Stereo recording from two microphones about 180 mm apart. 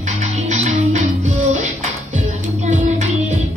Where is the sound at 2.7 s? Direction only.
40° right (ahead or behind).